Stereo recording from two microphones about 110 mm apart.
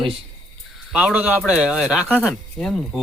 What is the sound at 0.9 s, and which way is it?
A man's voice, 10° right (ahead or behind).